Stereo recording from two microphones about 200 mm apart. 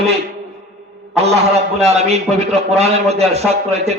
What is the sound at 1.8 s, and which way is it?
A man's voice, 30° right (ahead or behind).